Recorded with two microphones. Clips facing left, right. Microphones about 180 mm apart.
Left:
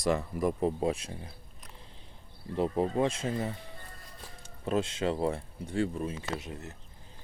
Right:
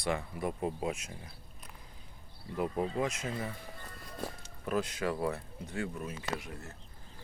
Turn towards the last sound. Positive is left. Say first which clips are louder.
# left 2 dB
turn(degrees=20)  # may be behind; listen again after turning